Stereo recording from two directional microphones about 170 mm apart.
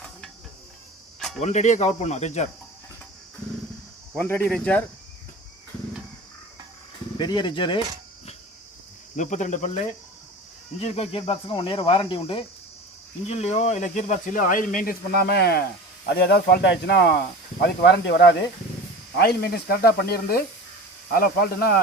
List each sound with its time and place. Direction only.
1.4 s speech: 40° left (ahead or behind)
4.1 s speech: 10° left (ahead or behind)
7.2 s speech: 25° left (ahead or behind)
9.1 s speech: 45° left (ahead or behind); by 18.2 s 85° left
19.1 s speech: 70° left (ahead or behind)